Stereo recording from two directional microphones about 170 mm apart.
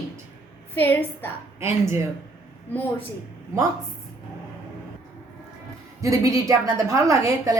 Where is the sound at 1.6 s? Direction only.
15° right (ahead or behind).